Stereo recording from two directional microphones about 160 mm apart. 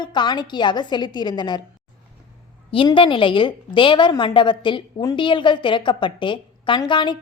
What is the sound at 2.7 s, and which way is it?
A woman's voice, 30° left (ahead or behind).